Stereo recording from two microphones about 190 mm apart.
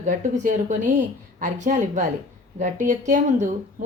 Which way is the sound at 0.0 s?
40° right (ahead or behind).